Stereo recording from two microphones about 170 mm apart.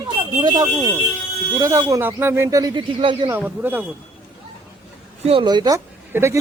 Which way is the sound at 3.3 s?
10° right (ahead or behind).